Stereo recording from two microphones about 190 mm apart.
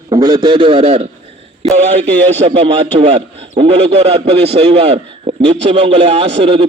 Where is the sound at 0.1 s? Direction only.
20° right (ahead or behind).